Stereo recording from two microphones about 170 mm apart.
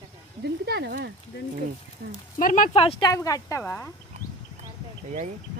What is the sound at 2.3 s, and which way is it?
Speech, 50° left (ahead or behind).